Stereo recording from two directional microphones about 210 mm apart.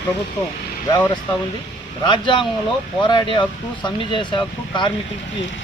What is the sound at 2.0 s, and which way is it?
Speech, 20° left (ahead or behind).